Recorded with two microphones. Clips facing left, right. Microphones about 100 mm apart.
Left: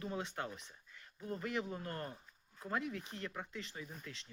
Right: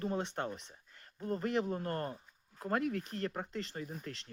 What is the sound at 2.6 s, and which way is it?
Speech, 55° right (ahead or behind).